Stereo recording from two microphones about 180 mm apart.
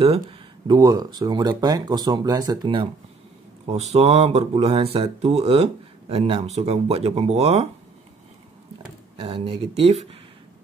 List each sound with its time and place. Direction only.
0.7 s speech: 20° right (ahead or behind)
9.1 s speech: 30° right (ahead or behind)